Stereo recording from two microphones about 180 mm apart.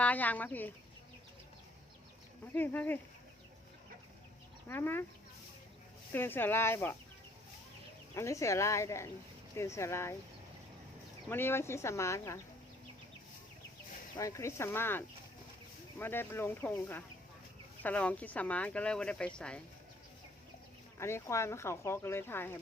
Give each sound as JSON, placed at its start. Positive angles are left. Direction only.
{"t": 0.0, "sound": "speech", "side_deg": 10}
{"t": 2.6, "sound": "speech", "side_deg": 10}
{"t": 4.7, "sound": "speech", "side_deg": 10}
{"t": 6.1, "sound": "speech", "side_deg": 10}
{"t": 8.1, "sound": "speech", "side_deg": 15}
{"t": 11.3, "sound": "speech", "side_deg": 10}
{"t": 14.2, "sound": "speech", "side_deg": 15}
{"t": 21.0, "sound": "speech", "side_deg": 15}